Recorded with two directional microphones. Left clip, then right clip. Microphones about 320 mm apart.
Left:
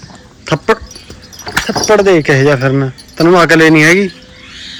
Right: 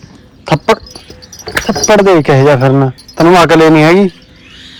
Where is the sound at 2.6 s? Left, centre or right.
Centre.